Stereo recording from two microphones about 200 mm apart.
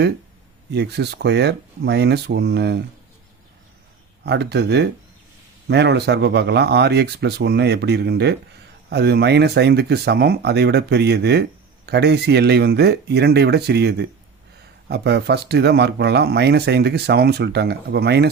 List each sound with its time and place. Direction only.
0.7 s speech: 55° right (ahead or behind)
4.2 s speech: 55° right (ahead or behind)